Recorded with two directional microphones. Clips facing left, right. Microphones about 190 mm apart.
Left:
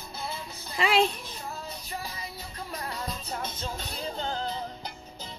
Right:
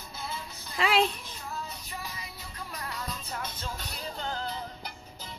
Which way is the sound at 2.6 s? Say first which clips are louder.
Left 3 dB; 30° left (ahead or behind).